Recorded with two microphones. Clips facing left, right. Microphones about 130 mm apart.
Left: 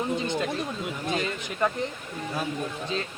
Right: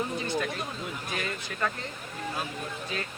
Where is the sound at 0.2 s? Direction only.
20° left (ahead or behind).